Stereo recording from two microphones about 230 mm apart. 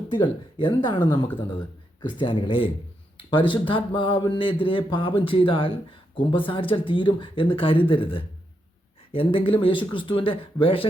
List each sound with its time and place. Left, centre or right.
0.1 s speech: left